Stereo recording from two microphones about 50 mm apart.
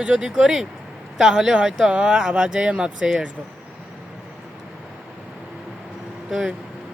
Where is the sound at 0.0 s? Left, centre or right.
Centre.